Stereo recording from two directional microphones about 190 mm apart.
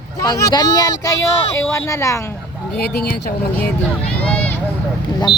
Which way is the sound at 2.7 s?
55° left (ahead or behind).